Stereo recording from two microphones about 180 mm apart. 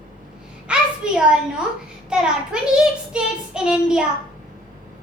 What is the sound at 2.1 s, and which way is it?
A child's voice, 5° right (ahead or behind).